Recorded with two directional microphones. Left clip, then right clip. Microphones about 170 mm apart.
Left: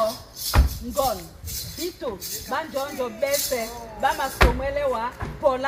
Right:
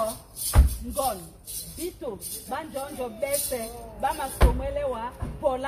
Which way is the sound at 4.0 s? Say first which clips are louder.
Left 6 dB; 5° left (ahead or behind).